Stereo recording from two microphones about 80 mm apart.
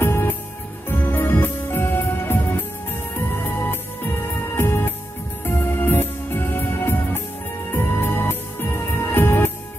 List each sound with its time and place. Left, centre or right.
0.0 s music: left